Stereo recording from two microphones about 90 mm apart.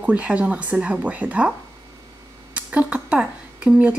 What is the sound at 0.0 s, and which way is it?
Speech, 15° right (ahead or behind).